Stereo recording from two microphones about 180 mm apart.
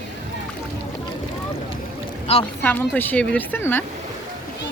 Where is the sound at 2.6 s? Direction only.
10° left (ahead or behind).